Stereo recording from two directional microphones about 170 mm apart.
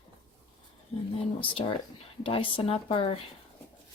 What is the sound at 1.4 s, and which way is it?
Speech, 30° left (ahead or behind).